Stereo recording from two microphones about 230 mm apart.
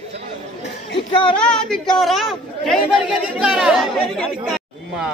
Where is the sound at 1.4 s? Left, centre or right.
Centre.